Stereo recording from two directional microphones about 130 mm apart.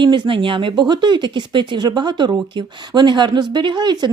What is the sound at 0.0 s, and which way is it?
Speech, 40° right (ahead or behind).